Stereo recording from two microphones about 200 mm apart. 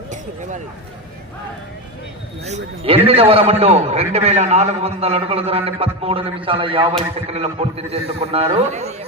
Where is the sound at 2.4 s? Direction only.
30° right (ahead or behind).